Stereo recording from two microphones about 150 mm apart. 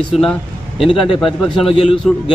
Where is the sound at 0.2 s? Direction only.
Centre (ahead or behind).